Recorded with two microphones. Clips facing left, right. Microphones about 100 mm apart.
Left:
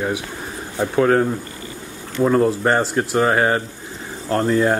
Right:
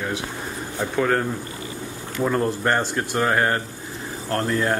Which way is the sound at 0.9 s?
5° left (ahead or behind).